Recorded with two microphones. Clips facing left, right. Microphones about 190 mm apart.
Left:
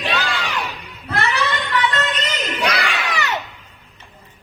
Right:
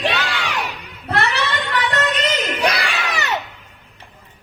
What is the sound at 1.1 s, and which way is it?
Child singing, 65° right (ahead or behind).